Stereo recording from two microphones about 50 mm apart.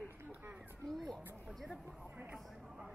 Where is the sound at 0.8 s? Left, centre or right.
Centre.